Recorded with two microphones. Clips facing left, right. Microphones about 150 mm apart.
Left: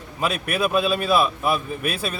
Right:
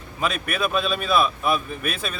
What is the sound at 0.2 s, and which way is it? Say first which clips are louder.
A man's voice: left 2 dB; 10° left (ahead or behind).